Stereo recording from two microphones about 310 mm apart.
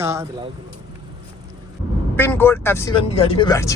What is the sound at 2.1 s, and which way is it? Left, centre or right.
Speech, centre.